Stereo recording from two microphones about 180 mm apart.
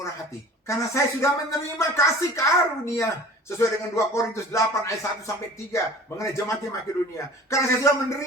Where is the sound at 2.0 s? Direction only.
15° left (ahead or behind).